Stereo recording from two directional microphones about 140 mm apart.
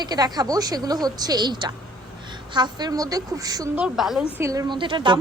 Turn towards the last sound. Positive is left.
turn(degrees=-35)  # may be behind; listen again after turning